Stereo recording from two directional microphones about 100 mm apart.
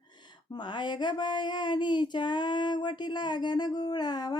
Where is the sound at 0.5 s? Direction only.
50° left (ahead or behind).